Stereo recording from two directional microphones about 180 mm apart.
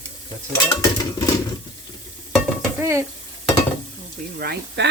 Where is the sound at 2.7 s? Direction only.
15° right (ahead or behind).